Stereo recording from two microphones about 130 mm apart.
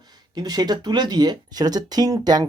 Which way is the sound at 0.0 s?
30° right (ahead or behind).